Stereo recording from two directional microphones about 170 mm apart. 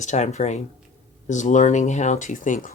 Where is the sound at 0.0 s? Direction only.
45° left (ahead or behind).